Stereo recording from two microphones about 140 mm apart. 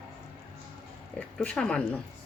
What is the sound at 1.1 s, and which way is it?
Speech, 10° left (ahead or behind).